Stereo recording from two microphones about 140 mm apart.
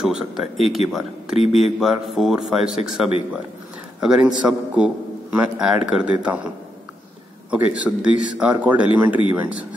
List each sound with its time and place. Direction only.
0.0 s speech: 5° right (ahead or behind)
1.3 s speech: 50° left (ahead or behind)
1.8 s a man's voice: centre (ahead or behind)
7.5 s a man's voice: 10° right (ahead or behind)